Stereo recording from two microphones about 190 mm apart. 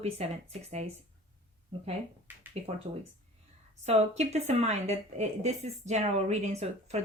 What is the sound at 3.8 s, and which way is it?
Speech, 35° right (ahead or behind).